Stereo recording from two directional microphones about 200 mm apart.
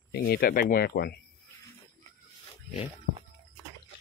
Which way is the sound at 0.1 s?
50° left (ahead or behind).